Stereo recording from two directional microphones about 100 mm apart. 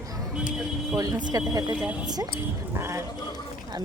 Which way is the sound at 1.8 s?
10° right (ahead or behind).